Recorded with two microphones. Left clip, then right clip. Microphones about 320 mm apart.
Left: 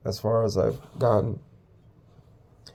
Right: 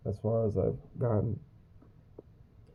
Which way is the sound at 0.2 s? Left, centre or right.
Left.